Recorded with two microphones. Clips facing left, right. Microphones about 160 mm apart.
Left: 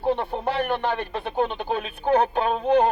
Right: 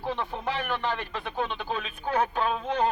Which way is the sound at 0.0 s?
55° left (ahead or behind).